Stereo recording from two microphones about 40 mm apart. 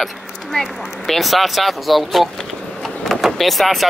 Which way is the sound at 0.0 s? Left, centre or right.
Centre.